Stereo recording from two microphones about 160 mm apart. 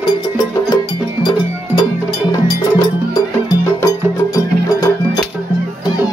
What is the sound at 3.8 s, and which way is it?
Music, 20° left (ahead or behind).